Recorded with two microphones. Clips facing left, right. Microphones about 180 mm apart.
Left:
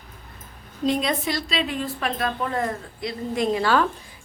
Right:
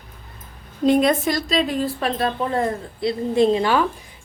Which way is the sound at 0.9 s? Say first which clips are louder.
Right 7 dB; 50° right (ahead or behind).